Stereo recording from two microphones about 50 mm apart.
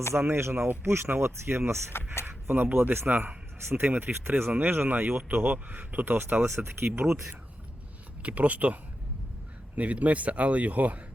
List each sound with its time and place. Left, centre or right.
0.3 s speech: right
2.2 s a man's voice: right
8.2 s speech: right